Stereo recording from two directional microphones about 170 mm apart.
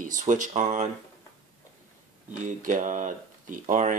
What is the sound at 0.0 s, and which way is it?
Speech, 50° right (ahead or behind).